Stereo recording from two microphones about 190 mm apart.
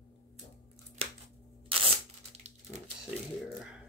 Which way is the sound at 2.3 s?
35° right (ahead or behind).